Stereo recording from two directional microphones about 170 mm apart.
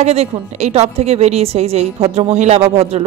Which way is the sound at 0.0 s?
40° right (ahead or behind).